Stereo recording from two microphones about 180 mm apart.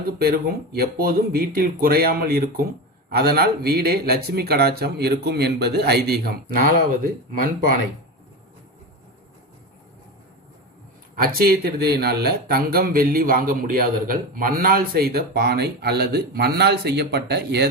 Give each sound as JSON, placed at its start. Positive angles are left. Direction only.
{"t": 0.2, "sound": "speech", "side_deg": -60}
{"t": 11.1, "sound": "speech", "side_deg": -55}